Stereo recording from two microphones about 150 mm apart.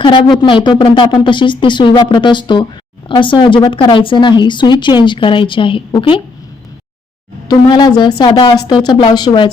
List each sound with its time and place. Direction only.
0.0 s speech: 30° left (ahead or behind)
7.4 s a woman's voice: 30° left (ahead or behind)